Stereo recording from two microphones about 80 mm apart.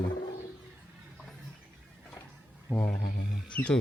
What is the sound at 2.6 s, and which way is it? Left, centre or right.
Speech, left.